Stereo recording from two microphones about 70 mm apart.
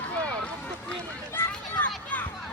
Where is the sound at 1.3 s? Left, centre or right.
Left.